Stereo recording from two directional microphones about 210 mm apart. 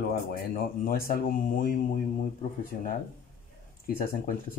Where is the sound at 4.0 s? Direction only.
45° left (ahead or behind).